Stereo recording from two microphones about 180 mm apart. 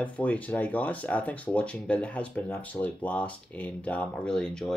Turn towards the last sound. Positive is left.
turn(degrees=5)  # may be behind; listen again after turning